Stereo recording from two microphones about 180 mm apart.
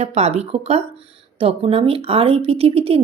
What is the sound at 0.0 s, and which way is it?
A woman's voice, 35° right (ahead or behind).